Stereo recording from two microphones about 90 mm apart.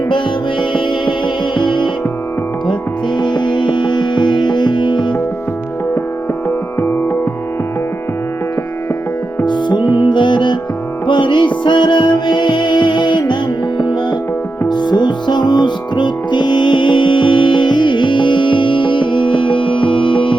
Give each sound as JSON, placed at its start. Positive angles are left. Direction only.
{"t": 0.6, "sound": "music", "side_deg": 65}
{"t": 3.2, "sound": "music", "side_deg": 60}
{"t": 6.7, "sound": "music", "side_deg": 25}
{"t": 9.5, "sound": "music", "side_deg": 60}